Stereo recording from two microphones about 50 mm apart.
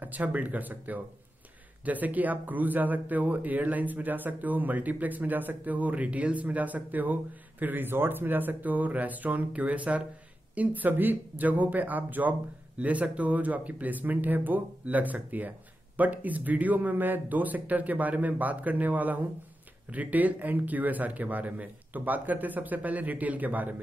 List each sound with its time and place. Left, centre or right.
0.0 s speech: right